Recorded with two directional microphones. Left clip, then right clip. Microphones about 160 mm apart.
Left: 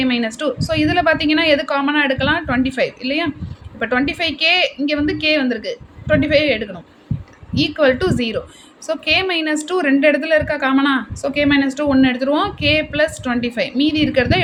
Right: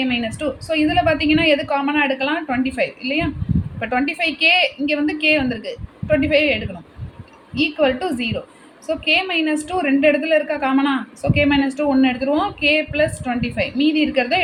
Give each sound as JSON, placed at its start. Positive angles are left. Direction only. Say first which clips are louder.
{"t": 0.0, "sound": "a woman's voice", "louder": "left 3 dB", "side_deg": 25}